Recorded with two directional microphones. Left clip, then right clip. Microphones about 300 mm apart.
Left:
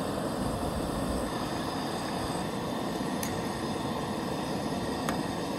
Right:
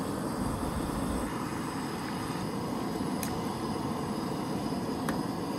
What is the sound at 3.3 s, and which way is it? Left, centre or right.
Vehicle, centre.